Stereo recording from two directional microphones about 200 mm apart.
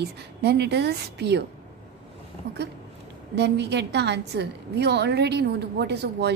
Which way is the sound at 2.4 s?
55° right (ahead or behind).